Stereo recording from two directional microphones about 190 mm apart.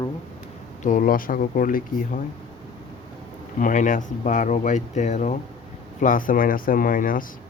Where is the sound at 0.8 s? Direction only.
45° left (ahead or behind).